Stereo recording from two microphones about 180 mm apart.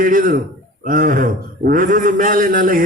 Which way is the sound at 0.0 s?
50° right (ahead or behind).